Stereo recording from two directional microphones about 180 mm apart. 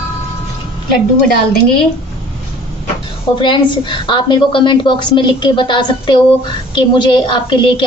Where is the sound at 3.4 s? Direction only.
25° left (ahead or behind).